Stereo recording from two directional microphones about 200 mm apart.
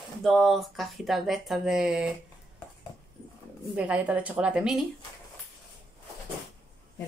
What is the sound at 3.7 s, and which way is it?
A woman's voice, 5° right (ahead or behind).